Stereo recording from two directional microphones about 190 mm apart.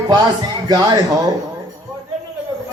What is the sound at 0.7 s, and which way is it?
Speech, 20° right (ahead or behind).